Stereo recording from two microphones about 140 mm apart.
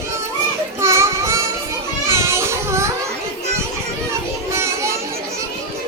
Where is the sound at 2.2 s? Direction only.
20° right (ahead or behind).